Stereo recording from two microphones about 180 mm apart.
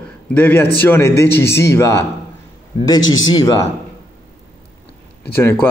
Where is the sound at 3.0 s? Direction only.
90° left.